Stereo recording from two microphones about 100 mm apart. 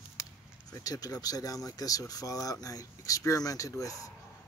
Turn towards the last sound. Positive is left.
turn(degrees=35)  # may be behind; listen again after turning